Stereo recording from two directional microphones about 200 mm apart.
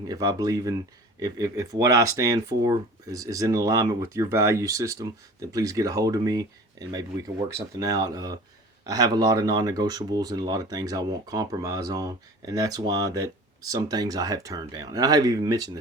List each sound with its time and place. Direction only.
0.1 s speech: 20° right (ahead or behind)